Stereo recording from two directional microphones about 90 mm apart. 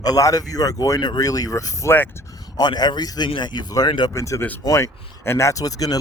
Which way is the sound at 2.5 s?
50° left (ahead or behind).